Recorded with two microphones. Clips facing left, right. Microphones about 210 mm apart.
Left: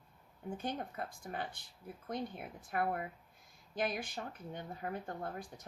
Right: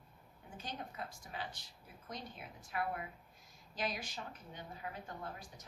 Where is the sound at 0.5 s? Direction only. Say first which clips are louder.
Left 6 dB; 55° left (ahead or behind).